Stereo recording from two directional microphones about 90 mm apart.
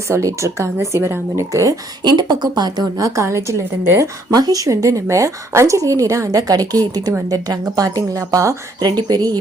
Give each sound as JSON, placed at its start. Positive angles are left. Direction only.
{"t": 0.1, "sound": "speech", "side_deg": -35}
{"t": 2.0, "sound": "speech", "side_deg": -55}
{"t": 3.2, "sound": "speech", "side_deg": -35}
{"t": 4.3, "sound": "speech", "side_deg": -45}
{"t": 9.0, "sound": "speech", "side_deg": -50}